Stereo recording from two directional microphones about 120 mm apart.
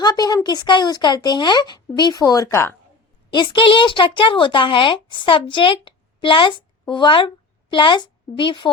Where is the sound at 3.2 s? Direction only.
40° left (ahead or behind).